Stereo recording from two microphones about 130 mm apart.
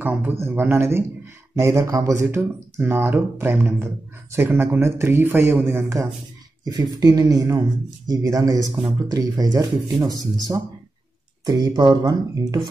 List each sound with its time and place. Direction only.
0.0 s speech: 15° right (ahead or behind); by 12.6 s 30° right (ahead or behind)